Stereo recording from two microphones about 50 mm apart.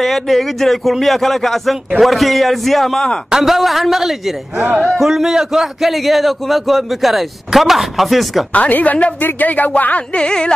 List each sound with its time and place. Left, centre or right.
0.0 s a man's voice: centre
8.5 s speech: left
10.1 s carnatic music: left